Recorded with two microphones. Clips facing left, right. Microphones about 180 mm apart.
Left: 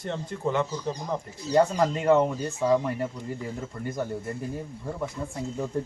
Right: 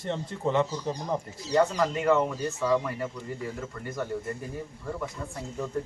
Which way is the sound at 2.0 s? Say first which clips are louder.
Left 3 dB; 30° left (ahead or behind).